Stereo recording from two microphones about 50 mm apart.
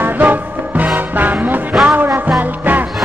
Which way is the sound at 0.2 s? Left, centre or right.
Right.